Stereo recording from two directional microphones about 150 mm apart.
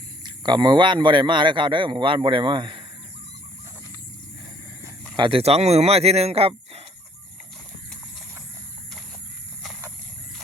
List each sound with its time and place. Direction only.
0.2 s a man's voice: 30° right (ahead or behind)
5.1 s speech: 35° right (ahead or behind)